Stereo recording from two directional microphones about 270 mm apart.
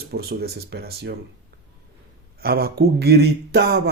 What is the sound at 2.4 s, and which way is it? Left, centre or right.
Speech, right.